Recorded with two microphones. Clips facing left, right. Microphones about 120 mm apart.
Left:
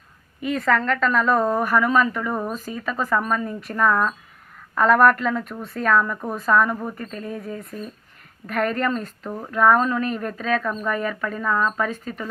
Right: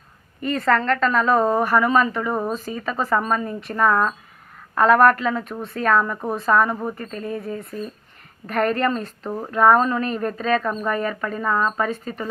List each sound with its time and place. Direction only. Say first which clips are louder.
0.7 s a woman's voice: right 2 dB; 5° left (ahead or behind)
2.3 s speech: right 2 dB; 20° right (ahead or behind)
2.7 s a woman's voice: even; 5° right (ahead or behind)